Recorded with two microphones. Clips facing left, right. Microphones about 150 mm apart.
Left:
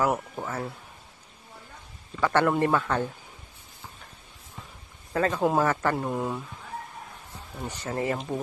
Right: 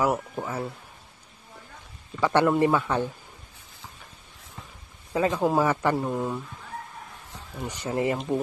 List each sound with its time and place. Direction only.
0.0 s speech: 10° right (ahead or behind)
2.1 s speech: 15° right (ahead or behind)
5.1 s speech: 10° right (ahead or behind)
5.4 s speech: centre (ahead or behind)
5.7 s speech: 10° right (ahead or behind)
5.9 s speech: centre (ahead or behind)
7.6 s speech: 15° right (ahead or behind)